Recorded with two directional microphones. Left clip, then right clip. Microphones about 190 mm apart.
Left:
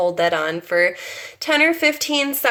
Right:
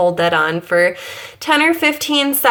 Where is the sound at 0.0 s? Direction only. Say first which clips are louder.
Right 4 dB; 25° right (ahead or behind).